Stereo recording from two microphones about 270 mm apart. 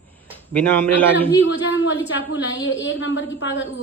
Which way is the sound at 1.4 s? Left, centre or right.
Left.